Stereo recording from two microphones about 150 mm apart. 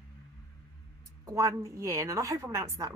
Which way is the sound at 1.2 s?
20° right (ahead or behind).